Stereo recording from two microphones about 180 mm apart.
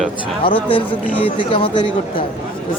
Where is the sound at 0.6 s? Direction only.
30° left (ahead or behind).